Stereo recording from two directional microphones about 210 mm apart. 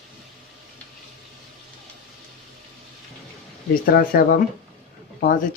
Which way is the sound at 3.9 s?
45° left (ahead or behind).